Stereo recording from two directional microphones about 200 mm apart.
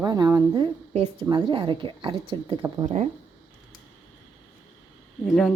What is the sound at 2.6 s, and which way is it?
Speech, 15° right (ahead or behind).